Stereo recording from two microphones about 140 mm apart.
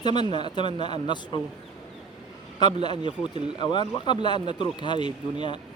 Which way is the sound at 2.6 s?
30° left (ahead or behind).